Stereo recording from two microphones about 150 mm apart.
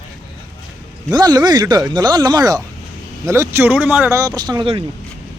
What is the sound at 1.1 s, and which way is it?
Speech, 25° right (ahead or behind).